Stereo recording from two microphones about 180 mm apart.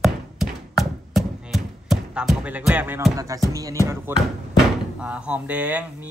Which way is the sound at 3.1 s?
20° right (ahead or behind).